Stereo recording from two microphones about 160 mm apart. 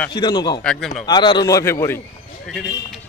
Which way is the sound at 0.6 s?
5° left (ahead or behind).